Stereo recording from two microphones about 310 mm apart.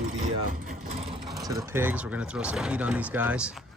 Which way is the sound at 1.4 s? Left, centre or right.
Centre.